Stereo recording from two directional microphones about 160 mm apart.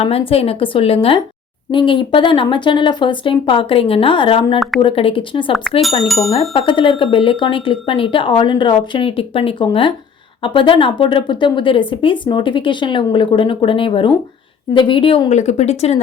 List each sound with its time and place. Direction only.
0.0 s speech: 40° left (ahead or behind)
6.1 s speech: centre (ahead or behind)
6.5 s speech: 35° left (ahead or behind)